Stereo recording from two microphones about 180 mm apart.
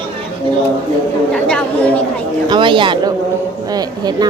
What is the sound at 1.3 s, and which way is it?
Chatter, 5° left (ahead or behind).